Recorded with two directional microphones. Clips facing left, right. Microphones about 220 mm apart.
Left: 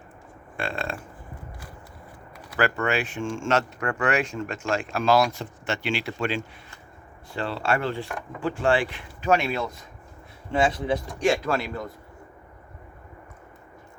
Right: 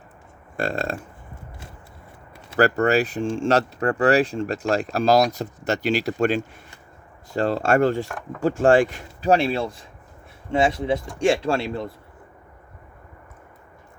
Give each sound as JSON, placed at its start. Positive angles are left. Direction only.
{"t": 0.5, "sound": "speech", "side_deg": -40}
{"t": 2.6, "sound": "speech", "side_deg": -40}